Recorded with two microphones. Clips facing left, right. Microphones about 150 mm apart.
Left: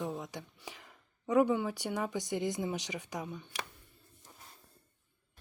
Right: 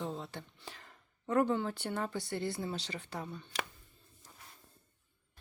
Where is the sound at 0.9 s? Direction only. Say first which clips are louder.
Left 2 dB; 10° left (ahead or behind).